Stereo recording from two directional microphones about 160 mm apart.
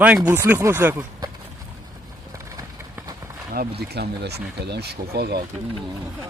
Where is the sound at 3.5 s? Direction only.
90° right.